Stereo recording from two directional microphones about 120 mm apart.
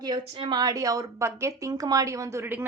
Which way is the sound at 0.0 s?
40° right (ahead or behind).